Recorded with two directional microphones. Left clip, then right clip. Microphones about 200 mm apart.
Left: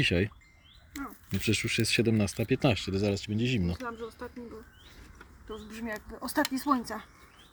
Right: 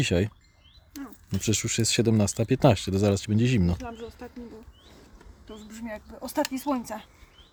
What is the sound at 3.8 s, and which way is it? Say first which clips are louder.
Speech: even; 30° right (ahead or behind).